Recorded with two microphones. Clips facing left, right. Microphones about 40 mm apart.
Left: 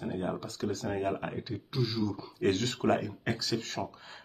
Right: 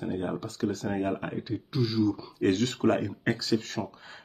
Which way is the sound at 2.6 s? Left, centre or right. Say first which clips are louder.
Right 3 dB; right.